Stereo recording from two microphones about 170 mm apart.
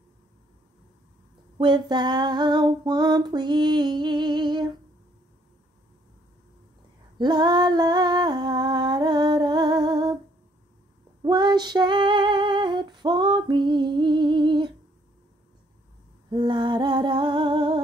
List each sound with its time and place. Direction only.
1.6 s female singing: 25° right (ahead or behind)
7.2 s female singing: 25° right (ahead or behind)
11.2 s female singing: 25° right (ahead or behind)
16.3 s female singing: 25° right (ahead or behind)